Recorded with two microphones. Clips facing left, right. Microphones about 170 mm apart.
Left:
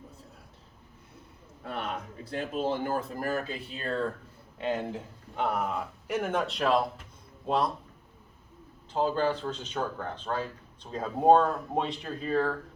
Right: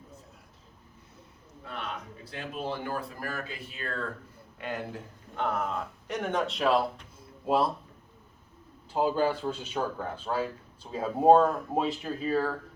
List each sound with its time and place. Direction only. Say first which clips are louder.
2.3 s speech: left 5 dB; 40° left (ahead or behind)
3.8 s a man's voice: left 5 dB; 30° left (ahead or behind); by 7.7 s 5° right (ahead or behind)
8.9 s speech: right 1 dB; 10° right (ahead or behind)